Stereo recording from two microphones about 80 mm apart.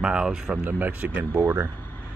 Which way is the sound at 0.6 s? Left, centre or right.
Right.